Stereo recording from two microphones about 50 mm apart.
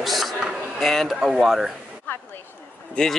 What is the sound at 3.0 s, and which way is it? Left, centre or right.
Speech, centre.